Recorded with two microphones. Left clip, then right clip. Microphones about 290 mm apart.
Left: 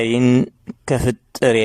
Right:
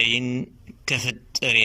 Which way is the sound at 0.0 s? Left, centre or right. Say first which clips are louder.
Left 5 dB; left.